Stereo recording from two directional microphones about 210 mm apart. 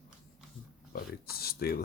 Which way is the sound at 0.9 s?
45° left (ahead or behind).